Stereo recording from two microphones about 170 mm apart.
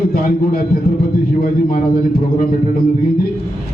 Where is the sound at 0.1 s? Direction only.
60° left (ahead or behind).